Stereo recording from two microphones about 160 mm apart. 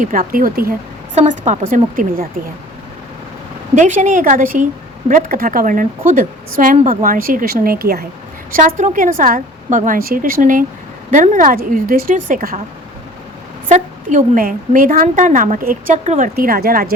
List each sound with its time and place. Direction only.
0.0 s a woman's voice: 60° right (ahead or behind)
1.1 s speech: 50° right (ahead or behind)
3.8 s a woman's voice: 50° right (ahead or behind); by 8.0 s 75° right (ahead or behind)
8.5 s a woman's voice: 55° right (ahead or behind)
13.7 s a woman's voice: 50° right (ahead or behind); by 16.9 s 65° right (ahead or behind)